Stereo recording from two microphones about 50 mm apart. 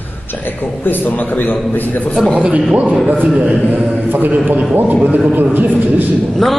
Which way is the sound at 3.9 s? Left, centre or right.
Right.